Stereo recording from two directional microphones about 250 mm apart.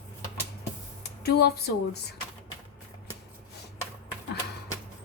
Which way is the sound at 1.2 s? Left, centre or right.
Left.